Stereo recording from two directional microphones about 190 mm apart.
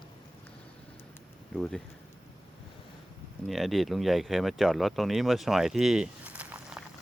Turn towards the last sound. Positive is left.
turn(degrees=-5)  # may be behind; listen again after turning